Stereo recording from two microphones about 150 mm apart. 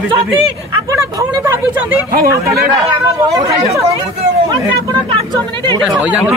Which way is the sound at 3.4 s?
25° right (ahead or behind).